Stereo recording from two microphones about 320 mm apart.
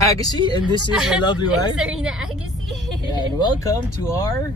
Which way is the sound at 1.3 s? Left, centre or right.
Centre.